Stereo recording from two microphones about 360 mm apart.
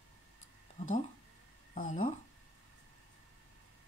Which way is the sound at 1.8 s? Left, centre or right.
Left.